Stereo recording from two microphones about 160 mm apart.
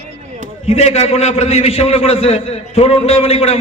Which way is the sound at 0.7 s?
40° left (ahead or behind).